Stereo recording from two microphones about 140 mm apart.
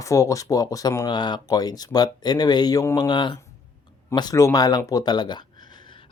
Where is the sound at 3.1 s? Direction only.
35° left (ahead or behind).